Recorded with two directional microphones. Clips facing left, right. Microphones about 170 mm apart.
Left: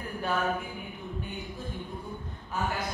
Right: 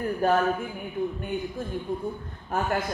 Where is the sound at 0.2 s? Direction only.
45° right (ahead or behind).